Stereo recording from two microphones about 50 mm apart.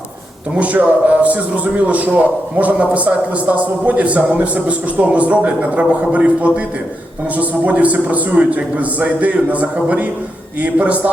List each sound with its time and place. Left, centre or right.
0.5 s a man's voice: right